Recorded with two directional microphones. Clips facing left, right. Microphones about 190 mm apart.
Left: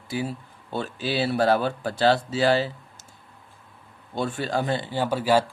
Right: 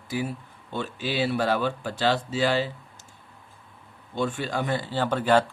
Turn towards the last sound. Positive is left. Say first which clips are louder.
# even
turn(degrees=10)  # may be behind; listen again after turning